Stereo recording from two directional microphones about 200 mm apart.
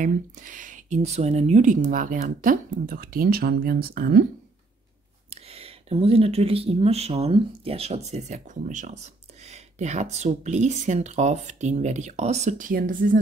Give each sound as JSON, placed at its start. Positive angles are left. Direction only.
{"t": 0.0, "sound": "speech", "side_deg": -40}
{"t": 5.3, "sound": "speech", "side_deg": -30}